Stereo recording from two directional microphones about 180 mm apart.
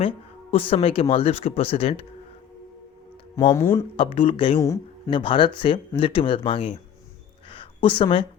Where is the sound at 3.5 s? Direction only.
15° left (ahead or behind).